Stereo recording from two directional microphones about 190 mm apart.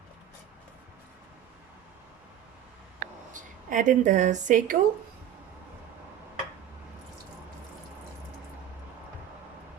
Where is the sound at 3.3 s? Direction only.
40° right (ahead or behind).